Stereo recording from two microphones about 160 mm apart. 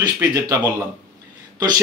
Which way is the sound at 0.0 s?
25° right (ahead or behind).